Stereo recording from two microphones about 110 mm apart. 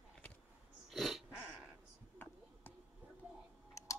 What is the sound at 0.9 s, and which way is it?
Dog, centre (ahead or behind).